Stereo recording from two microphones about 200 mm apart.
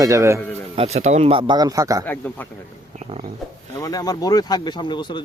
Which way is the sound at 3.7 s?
20° left (ahead or behind).